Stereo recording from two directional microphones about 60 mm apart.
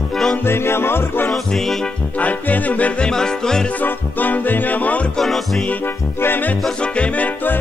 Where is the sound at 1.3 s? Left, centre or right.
Centre.